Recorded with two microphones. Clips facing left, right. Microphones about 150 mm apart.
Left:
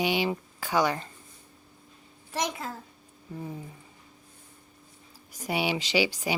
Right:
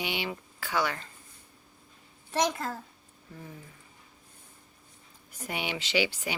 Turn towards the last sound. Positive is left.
turn(degrees=10)  # may be behind; listen again after turning